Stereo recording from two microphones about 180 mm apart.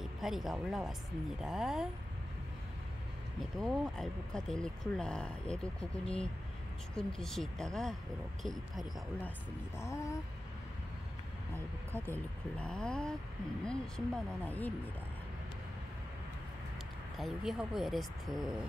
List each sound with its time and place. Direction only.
0.2 s speech: centre (ahead or behind)
3.5 s speech: centre (ahead or behind)
9.8 s speech: 15° left (ahead or behind)
11.9 s speech: 10° left (ahead or behind)
17.2 s speech: centre (ahead or behind)